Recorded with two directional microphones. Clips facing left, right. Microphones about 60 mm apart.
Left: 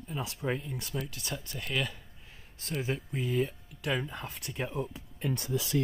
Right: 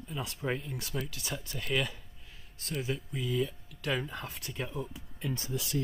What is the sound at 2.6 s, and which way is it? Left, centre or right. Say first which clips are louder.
Speech: left 1 dB; left.